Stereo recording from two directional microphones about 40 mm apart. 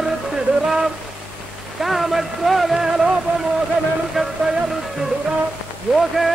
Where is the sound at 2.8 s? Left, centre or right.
Centre.